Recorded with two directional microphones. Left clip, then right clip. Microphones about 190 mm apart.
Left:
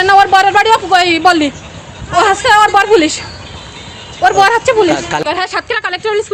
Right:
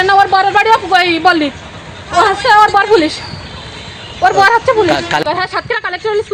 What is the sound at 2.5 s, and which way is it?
Speech, 10° left (ahead or behind).